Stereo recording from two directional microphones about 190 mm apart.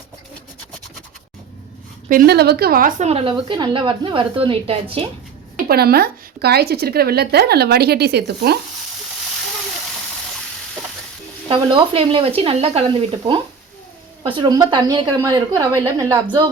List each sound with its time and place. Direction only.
2.0 s a woman's voice: 50° right (ahead or behind)
3.1 s a woman's voice: 30° right (ahead or behind)
5.6 s a woman's voice: 55° right (ahead or behind)
11.4 s a woman's voice: 30° right (ahead or behind)